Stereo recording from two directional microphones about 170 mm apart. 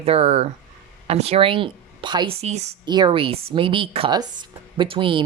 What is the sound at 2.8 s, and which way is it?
Speech, 25° right (ahead or behind).